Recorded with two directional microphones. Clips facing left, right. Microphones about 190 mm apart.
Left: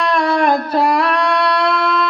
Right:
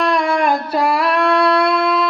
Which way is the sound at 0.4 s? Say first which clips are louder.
Left 2 dB; 10° right (ahead or behind).